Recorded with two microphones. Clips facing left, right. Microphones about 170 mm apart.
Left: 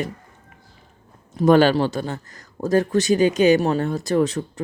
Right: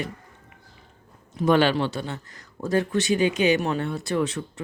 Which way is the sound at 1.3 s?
40° left (ahead or behind).